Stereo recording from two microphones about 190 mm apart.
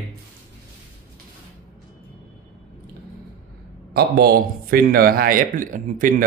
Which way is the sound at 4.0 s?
55° right (ahead or behind).